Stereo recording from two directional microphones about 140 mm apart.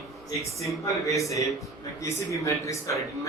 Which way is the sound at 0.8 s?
20° left (ahead or behind).